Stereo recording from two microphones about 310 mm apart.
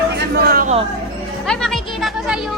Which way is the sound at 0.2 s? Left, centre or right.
Right.